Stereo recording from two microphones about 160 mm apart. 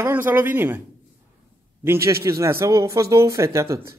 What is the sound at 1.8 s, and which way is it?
Speech, 15° right (ahead or behind).